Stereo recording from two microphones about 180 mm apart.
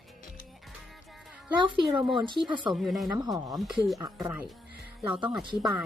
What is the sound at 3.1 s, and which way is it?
Speech, 20° right (ahead or behind).